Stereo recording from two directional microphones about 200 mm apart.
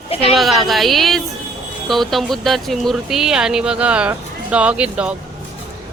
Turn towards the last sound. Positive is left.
turn(degrees=-5)  # may be behind; listen again after turning